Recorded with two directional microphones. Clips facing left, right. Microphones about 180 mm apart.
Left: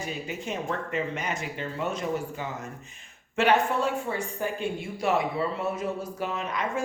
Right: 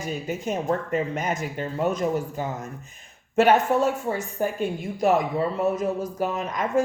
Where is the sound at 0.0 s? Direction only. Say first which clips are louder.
Right 5 dB; 45° right (ahead or behind).